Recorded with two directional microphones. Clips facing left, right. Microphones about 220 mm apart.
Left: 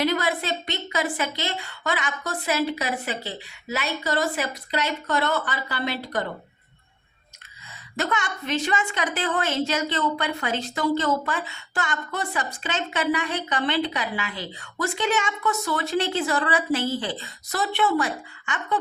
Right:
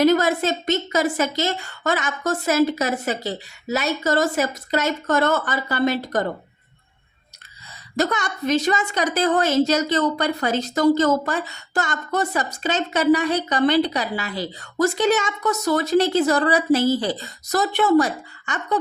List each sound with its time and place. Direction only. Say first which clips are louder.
0.0 s a woman's voice: right 7 dB; 45° right (ahead or behind)
7.9 s a woman's voice: right 5 dB; 40° right (ahead or behind)